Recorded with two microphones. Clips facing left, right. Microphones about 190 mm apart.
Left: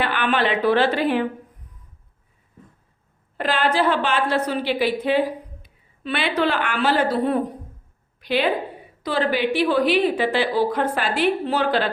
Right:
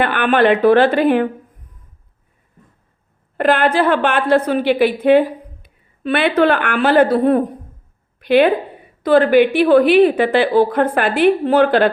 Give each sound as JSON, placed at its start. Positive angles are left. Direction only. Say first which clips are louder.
{"t": 0.0, "sound": "a woman's voice", "louder": "right 7 dB", "side_deg": -50}
{"t": 3.3, "sound": "a woman's voice", "louder": "right 6 dB", "side_deg": -55}